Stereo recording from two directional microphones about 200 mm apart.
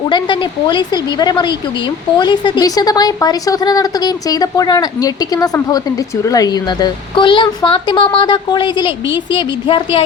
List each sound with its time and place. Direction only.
0.1 s speech: 20° left (ahead or behind)